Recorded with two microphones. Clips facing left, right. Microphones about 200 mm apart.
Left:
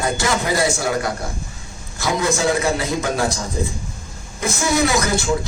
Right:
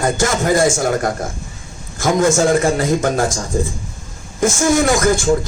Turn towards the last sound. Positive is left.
turn(degrees=-50)  # may be behind; listen again after turning